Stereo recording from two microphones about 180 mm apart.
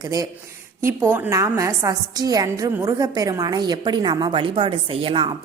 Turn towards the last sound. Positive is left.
turn(degrees=-30)  # may be behind; listen again after turning